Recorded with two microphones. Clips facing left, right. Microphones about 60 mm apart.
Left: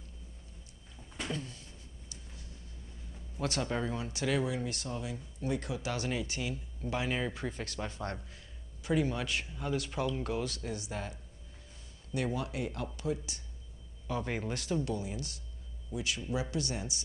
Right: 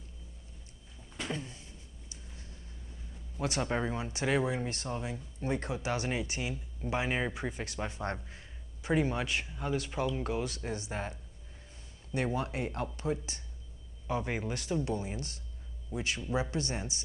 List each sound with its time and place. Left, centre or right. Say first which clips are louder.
1.3 s a sound: right 1 dB; right
3.3 s speech: right 1 dB; centre
9.3 s speech: right 1 dB; centre
10.5 s speech: right 1 dB; right
14.2 s speech: right 1 dB; centre
14.8 s speech: right 1 dB; right